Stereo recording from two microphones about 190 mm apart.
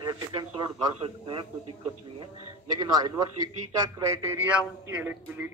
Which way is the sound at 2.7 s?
20° right (ahead or behind).